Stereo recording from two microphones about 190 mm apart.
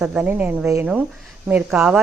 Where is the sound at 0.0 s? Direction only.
5° right (ahead or behind).